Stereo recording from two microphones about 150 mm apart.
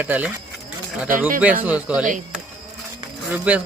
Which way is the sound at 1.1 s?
65° right (ahead or behind).